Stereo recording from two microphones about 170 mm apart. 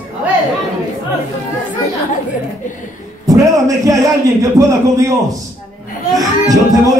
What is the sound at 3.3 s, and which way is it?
Speech, 20° right (ahead or behind).